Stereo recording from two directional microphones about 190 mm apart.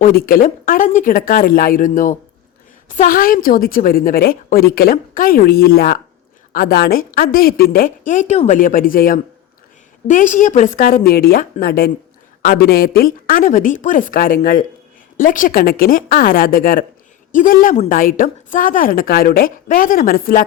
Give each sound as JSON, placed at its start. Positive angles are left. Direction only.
{"t": 0.0, "sound": "a woman's voice", "side_deg": 50}
{"t": 2.9, "sound": "a woman's voice", "side_deg": 45}